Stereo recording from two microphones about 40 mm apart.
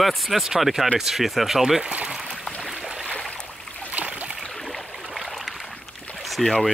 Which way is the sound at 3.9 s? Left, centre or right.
Right.